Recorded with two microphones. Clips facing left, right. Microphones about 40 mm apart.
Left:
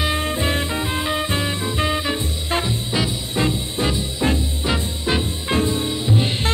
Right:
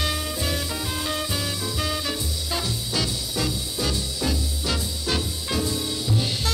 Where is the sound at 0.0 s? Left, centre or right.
Left.